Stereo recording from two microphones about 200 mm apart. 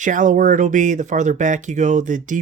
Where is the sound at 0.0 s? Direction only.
40° right (ahead or behind).